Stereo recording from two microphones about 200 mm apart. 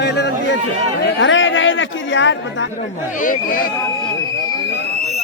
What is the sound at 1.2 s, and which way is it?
Speech, 70° left (ahead or behind).